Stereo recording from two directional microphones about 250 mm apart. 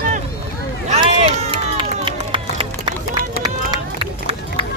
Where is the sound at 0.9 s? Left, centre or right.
Right.